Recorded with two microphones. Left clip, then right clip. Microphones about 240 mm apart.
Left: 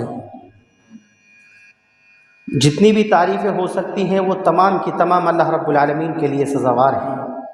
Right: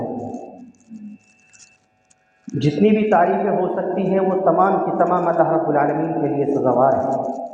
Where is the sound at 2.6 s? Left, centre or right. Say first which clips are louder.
Left 4 dB; left.